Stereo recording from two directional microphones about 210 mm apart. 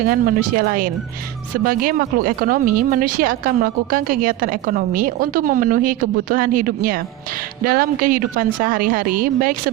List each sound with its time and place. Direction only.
0.0 s speech: 45° right (ahead or behind)